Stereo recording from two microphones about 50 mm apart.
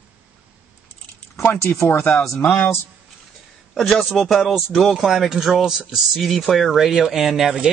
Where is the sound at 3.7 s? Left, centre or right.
Centre.